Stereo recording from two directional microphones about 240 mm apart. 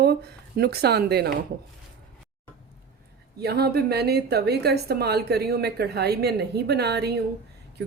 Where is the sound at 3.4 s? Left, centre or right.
Right.